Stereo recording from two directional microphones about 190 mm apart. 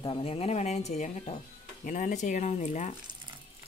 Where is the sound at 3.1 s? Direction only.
25° right (ahead or behind).